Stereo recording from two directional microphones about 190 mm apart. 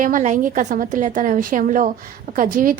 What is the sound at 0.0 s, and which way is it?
A woman's voice, 40° right (ahead or behind).